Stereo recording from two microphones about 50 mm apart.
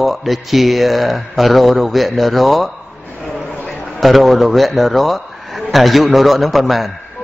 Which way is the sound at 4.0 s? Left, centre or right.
Centre.